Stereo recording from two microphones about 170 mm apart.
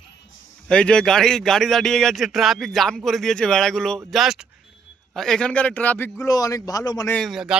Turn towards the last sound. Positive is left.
turn(degrees=0)  # may be behind; listen again after turning